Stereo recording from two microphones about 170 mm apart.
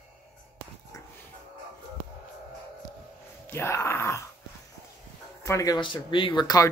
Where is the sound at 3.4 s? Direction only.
15° left (ahead or behind).